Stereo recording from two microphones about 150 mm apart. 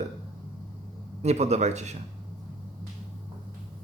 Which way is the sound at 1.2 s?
45° right (ahead or behind).